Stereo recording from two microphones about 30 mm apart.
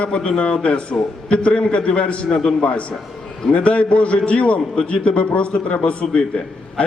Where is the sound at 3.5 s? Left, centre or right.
Left.